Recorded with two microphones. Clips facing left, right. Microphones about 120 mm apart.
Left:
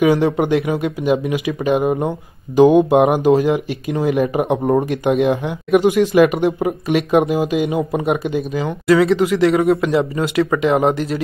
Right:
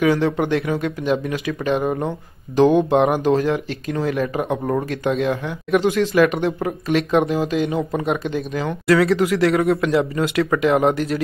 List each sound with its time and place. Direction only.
0.0 s speech: 15° left (ahead or behind); by 11.2 s centre (ahead or behind)